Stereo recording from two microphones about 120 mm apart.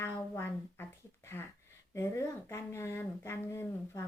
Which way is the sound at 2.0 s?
25° left (ahead or behind).